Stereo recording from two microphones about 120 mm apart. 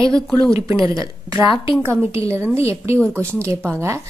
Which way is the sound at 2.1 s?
20° right (ahead or behind).